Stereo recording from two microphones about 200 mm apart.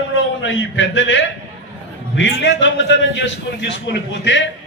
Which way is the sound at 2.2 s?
65° left (ahead or behind).